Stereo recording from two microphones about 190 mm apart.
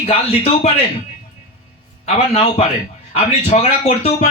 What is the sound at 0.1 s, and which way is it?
Speech, 30° left (ahead or behind).